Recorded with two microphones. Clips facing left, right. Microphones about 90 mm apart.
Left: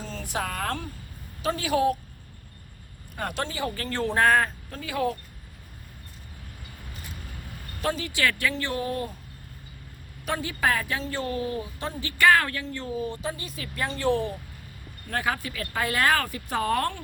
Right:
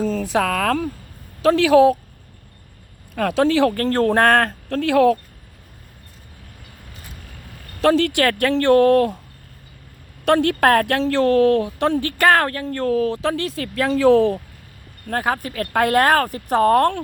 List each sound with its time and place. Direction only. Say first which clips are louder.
0.3 s speech: right 9 dB; 90° right
3.2 s speech: right 14 dB; 90° right
3.8 s a woman's voice: right 8 dB; 55° right (ahead or behind); by 5.1 s 90° right
7.8 s speech: right 13 dB; 90° right
8.2 s speech: right 9 dB; 55° right (ahead or behind); by 9.1 s 70° right (ahead or behind)
10.2 s a woman's voice: right 11 dB; 75° right (ahead or behind); by 14.3 s 90° right
15.0 s speech: right 6 dB; 45° right (ahead or behind)